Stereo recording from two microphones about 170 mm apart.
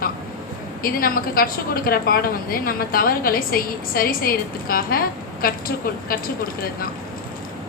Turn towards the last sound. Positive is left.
turn(degrees=60)  # may be behind; listen again after turning